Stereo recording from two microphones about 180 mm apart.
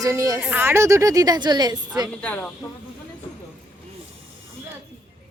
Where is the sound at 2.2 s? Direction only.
5° left (ahead or behind).